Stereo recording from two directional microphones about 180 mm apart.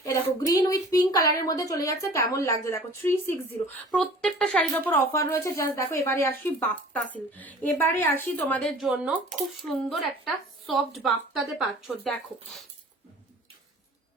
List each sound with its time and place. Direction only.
0.0 s speech: 20° left (ahead or behind)
8.9 s speech: 5° right (ahead or behind)